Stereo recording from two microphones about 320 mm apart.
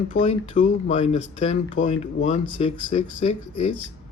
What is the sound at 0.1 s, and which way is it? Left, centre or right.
Speech, left.